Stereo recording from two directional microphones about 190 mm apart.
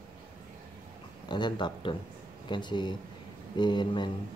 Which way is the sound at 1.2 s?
25° left (ahead or behind).